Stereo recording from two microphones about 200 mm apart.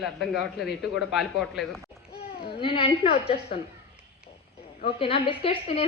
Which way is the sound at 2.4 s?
25° left (ahead or behind).